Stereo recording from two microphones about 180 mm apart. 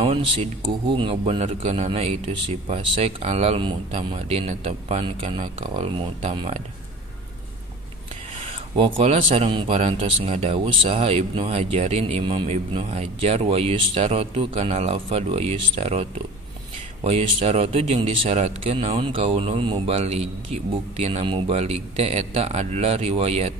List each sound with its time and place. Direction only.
0.0 s speech: 30° right (ahead or behind)
6.3 s speech: 30° right (ahead or behind)
8.4 s speech: 30° right (ahead or behind)